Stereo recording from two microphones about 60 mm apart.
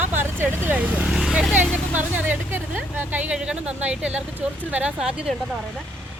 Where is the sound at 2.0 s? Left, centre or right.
Right.